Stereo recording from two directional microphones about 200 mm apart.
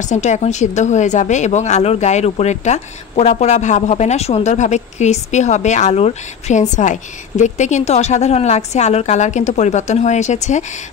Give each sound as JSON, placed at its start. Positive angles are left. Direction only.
{"t": 0.0, "sound": "a woman's voice", "side_deg": 35}